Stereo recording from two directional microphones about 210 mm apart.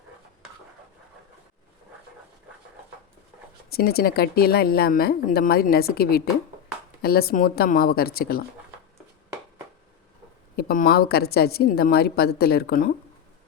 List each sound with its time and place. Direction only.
3.7 s speech: 45° left (ahead or behind)
10.6 s speech: 45° left (ahead or behind)